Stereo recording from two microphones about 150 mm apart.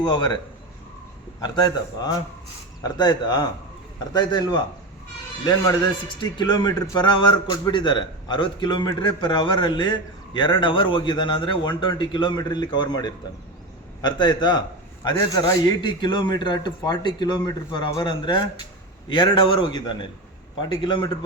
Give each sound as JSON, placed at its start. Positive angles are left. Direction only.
{"t": 0.1, "sound": "a man's voice", "side_deg": 30}
{"t": 1.4, "sound": "a man's voice", "side_deg": 25}
{"t": 6.1, "sound": "a man's voice", "side_deg": 30}